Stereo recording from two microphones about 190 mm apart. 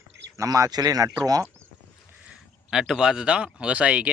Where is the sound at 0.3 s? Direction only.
20° right (ahead or behind).